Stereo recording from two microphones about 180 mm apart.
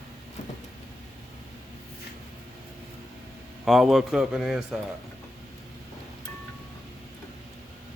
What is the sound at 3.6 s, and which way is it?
A man's voice, centre (ahead or behind).